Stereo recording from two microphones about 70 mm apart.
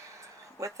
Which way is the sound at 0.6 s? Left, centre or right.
Right.